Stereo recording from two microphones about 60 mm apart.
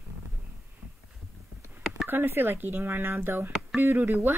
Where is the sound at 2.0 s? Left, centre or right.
Right.